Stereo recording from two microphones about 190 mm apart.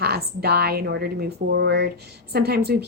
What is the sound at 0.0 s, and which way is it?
A woman's voice, 55° right (ahead or behind).